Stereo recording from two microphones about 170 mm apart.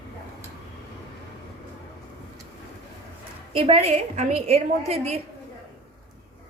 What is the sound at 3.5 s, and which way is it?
A woman's voice, 35° right (ahead or behind).